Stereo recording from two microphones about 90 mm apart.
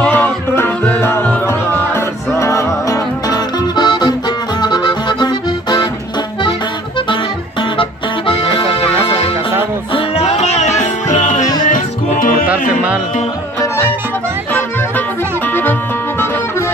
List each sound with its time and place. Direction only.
0.0 s music: 20° left (ahead or behind)
1.5 s music: 30° left (ahead or behind); by 5.9 s 55° left (ahead or behind)
8.3 s music: 75° left (ahead or behind)
9.9 s music: 75° left (ahead or behind)
12.4 s music: 15° right (ahead or behind)
13.6 s music: 30° left (ahead or behind)